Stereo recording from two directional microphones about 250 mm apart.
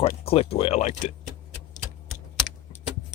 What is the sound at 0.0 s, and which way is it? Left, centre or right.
Speech, left.